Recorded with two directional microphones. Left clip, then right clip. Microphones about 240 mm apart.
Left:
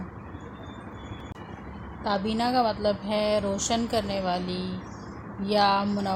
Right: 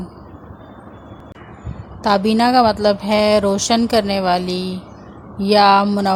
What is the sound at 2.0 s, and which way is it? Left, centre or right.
A woman's voice, right.